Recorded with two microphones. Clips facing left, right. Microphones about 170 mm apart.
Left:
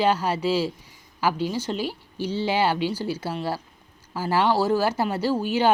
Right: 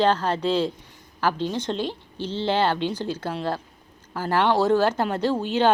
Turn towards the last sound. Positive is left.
turn(degrees=10)  # may be behind; listen again after turning